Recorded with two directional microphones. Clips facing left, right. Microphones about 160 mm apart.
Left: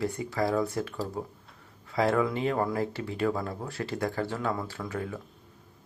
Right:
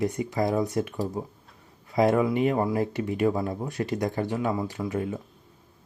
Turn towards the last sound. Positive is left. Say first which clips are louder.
# right 5 dB
turn(degrees=-20)  # may be behind; listen again after turning